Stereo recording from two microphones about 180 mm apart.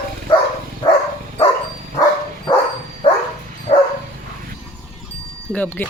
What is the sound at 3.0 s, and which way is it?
Bow-wow, 30° left (ahead or behind).